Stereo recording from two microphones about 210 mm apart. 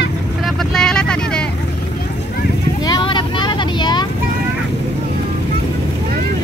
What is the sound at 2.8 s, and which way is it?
Vehicle, 20° left (ahead or behind).